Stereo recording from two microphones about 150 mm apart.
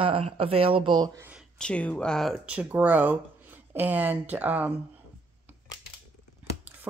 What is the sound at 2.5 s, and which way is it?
Speech, 10° right (ahead or behind).